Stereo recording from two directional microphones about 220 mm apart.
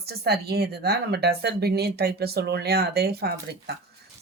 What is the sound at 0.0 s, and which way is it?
Speech, 45° right (ahead or behind).